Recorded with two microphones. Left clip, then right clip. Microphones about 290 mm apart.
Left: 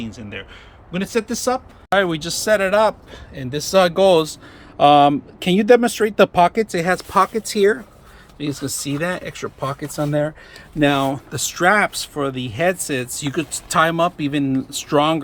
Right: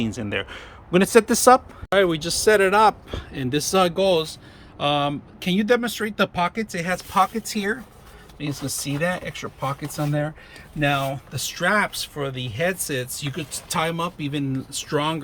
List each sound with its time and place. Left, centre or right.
0.0 s speech: centre
1.9 s speech: centre